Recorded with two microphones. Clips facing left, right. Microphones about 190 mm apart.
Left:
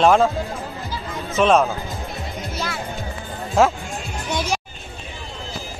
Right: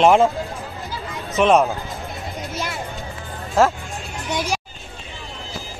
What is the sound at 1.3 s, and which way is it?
Speech, 15° right (ahead or behind).